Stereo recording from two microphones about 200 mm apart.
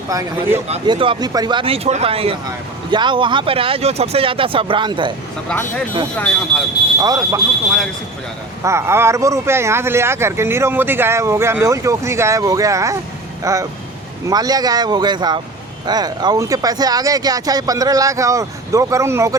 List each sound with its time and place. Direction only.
0.1 s speech: 15° right (ahead or behind)
5.5 s speech: 5° left (ahead or behind)
7.0 s speech: 15° right (ahead or behind)
8.6 s speech: 15° right (ahead or behind)